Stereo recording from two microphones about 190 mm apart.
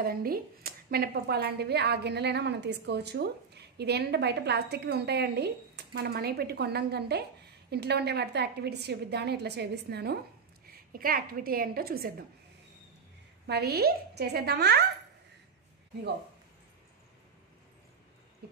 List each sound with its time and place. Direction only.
0.0 s a woman's voice: 50° right (ahead or behind)
13.5 s speech: 55° right (ahead or behind)